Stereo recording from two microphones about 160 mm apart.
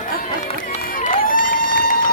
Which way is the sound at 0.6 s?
60° left (ahead or behind).